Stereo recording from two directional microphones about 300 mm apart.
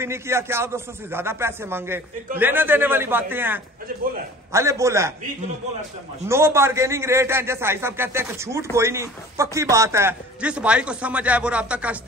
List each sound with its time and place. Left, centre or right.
0.0 s a man's voice: centre
6.2 s a man's voice: centre